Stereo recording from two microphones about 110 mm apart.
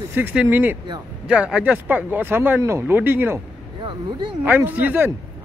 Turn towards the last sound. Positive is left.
turn(degrees=-15)  # may be behind; listen again after turning